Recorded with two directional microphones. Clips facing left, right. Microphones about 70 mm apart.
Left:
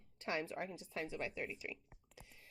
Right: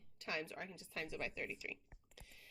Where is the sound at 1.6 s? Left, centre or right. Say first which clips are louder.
Left 2 dB; left.